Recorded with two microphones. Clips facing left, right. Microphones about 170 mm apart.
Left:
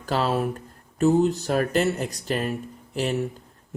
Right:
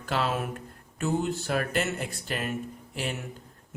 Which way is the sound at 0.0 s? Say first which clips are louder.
Left 5 dB; 40° left (ahead or behind).